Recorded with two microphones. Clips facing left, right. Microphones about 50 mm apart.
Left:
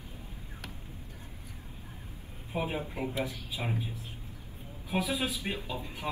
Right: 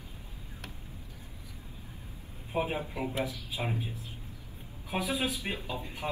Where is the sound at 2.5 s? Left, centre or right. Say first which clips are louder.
Right 2 dB; right.